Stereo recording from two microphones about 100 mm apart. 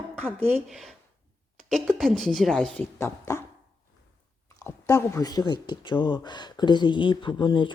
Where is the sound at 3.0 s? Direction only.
30° left (ahead or behind).